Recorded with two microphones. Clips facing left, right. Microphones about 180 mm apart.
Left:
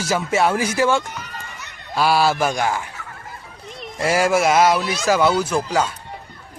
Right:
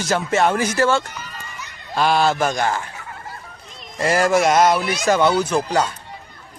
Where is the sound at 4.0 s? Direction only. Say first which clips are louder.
Right 1 dB; 5° left (ahead or behind).